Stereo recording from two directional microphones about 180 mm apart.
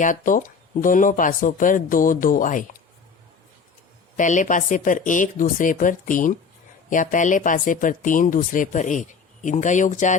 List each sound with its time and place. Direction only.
0.0 s speech: 45° left (ahead or behind)
4.2 s speech: 45° left (ahead or behind)